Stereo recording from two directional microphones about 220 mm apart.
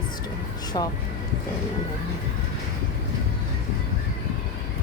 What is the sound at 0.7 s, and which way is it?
Speech, 20° left (ahead or behind).